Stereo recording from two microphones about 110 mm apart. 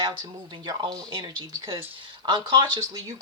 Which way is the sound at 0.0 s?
45° right (ahead or behind).